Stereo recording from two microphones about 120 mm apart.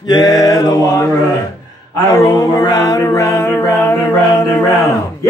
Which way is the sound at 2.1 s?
30° left (ahead or behind).